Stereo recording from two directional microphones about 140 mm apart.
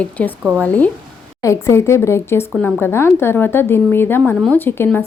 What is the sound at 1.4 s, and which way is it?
A woman's voice, 20° left (ahead or behind).